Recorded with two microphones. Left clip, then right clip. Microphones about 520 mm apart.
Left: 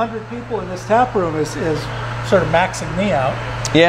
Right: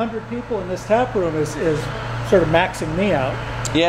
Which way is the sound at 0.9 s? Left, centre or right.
Left.